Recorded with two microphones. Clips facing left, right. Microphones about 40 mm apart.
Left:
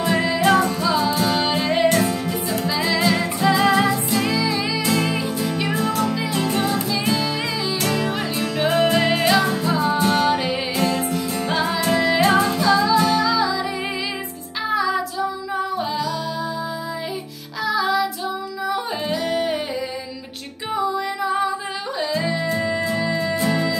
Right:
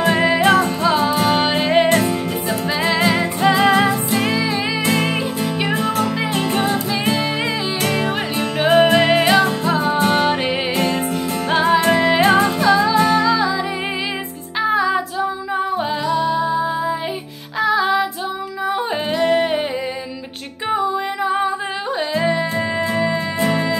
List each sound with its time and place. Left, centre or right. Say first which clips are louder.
0.0 s music: right 4 dB; right
9.9 s music: right 2 dB; right
14.7 s music: right 3 dB; right
16.1 s music: right 7 dB; right
18.7 s singing: right 3 dB; right
20.7 s music: right 2 dB; right